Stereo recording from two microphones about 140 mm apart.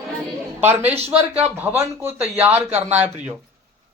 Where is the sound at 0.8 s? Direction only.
15° right (ahead or behind).